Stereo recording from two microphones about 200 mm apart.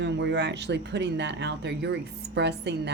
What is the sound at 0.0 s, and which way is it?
Speech, 60° right (ahead or behind).